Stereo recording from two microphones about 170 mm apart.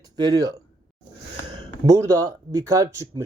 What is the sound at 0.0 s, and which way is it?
Speech, 25° right (ahead or behind).